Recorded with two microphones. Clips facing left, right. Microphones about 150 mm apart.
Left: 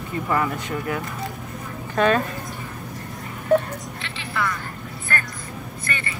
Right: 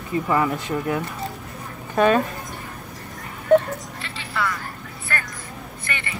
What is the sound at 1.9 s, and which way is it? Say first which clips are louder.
Speech: right 2 dB; 10° right (ahead or behind).